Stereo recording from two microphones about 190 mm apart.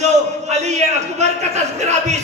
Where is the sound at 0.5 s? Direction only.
35° right (ahead or behind).